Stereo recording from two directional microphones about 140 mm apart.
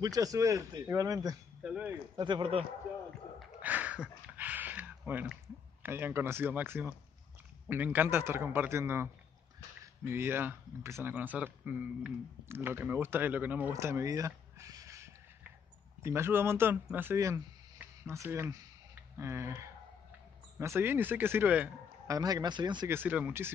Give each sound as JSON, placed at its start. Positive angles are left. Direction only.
{"t": 0.0, "sound": "a man's voice", "side_deg": -25}
{"t": 1.6, "sound": "speech", "side_deg": -10}
{"t": 2.1, "sound": "a man's voice", "side_deg": -30}
{"t": 3.3, "sound": "a sound", "side_deg": -10}
{"t": 5.8, "sound": "a man's voice", "side_deg": -15}
{"t": 22.0, "sound": "a man's voice", "side_deg": -25}
{"t": 22.8, "sound": "speech", "side_deg": -15}